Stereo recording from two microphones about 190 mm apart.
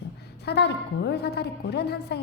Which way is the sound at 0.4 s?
60° left (ahead or behind).